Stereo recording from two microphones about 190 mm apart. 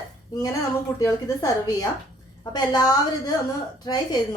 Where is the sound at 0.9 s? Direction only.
20° left (ahead or behind).